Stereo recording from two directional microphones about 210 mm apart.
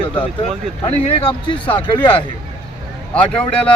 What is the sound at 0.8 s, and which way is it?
Speech, 25° left (ahead or behind).